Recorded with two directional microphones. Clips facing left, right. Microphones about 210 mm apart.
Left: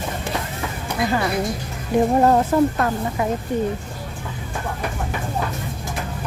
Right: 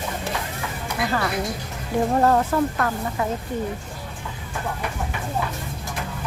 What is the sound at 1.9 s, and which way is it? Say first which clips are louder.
Speech: left 3 dB; 20° left (ahead or behind).